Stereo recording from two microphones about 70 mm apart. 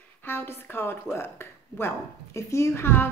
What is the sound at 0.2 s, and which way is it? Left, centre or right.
Speech, left.